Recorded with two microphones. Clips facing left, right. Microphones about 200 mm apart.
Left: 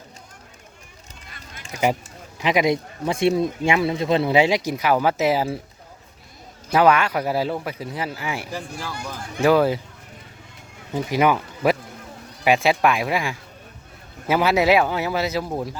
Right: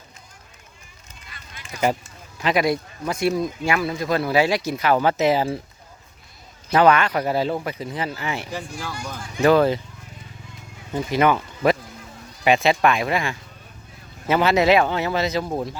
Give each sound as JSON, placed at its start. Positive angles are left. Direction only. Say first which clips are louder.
{"t": 2.4, "sound": "a man's voice", "louder": "left 1 dB", "side_deg": 15}
{"t": 6.7, "sound": "speech", "louder": "right 1 dB", "side_deg": 10}
{"t": 10.9, "sound": "speech", "louder": "even", "side_deg": 10}